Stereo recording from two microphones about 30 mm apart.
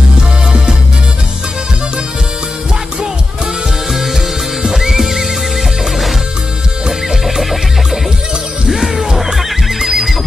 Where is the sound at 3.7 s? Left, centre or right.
Centre.